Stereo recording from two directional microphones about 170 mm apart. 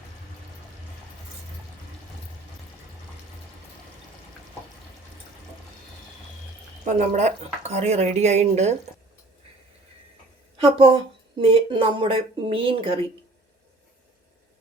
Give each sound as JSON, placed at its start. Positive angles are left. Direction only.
{"t": 6.8, "sound": "speech", "side_deg": -45}
{"t": 10.6, "sound": "speech", "side_deg": -35}